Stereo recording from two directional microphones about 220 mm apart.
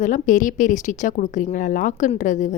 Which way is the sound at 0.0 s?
35° left (ahead or behind).